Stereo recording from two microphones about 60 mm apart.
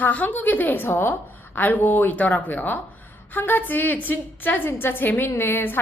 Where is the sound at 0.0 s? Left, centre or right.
Left.